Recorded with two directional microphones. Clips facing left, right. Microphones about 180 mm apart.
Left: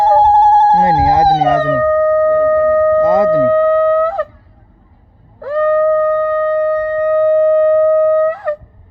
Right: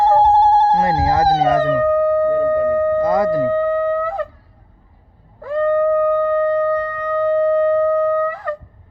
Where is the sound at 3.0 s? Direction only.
25° left (ahead or behind).